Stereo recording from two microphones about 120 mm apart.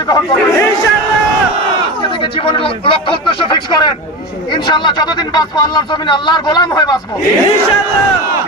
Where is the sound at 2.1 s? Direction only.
50° left (ahead or behind); by 7.0 s 35° left (ahead or behind).